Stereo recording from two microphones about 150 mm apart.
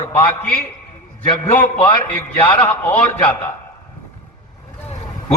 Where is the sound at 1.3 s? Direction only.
30° left (ahead or behind).